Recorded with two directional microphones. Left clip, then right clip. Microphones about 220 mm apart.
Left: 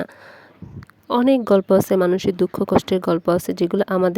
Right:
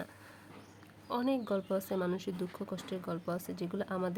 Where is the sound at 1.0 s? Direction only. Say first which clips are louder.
Left 17 dB; 45° left (ahead or behind).